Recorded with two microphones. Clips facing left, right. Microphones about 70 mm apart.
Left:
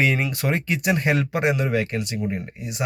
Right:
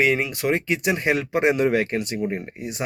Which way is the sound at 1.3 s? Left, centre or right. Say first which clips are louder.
Right 2 dB; right.